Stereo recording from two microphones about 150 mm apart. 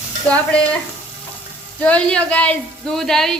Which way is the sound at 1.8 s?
10° left (ahead or behind).